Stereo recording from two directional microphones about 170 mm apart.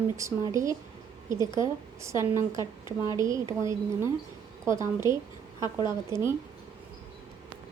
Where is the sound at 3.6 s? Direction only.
20° right (ahead or behind).